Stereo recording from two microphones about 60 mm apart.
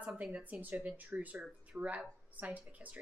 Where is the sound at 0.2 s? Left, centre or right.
Right.